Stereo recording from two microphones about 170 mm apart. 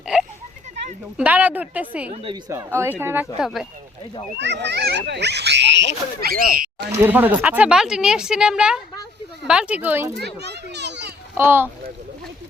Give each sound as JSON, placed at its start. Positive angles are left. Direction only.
{"t": 0.1, "sound": "a sound", "side_deg": -5}
{"t": 1.1, "sound": "a woman's voice", "side_deg": -10}
{"t": 3.3, "sound": "speech", "side_deg": -5}
{"t": 4.4, "sound": "speech", "side_deg": -90}
{"t": 7.0, "sound": "a woman's voice", "side_deg": -10}
{"t": 10.2, "sound": "children playing", "side_deg": -80}
{"t": 11.3, "sound": "a woman's voice", "side_deg": -10}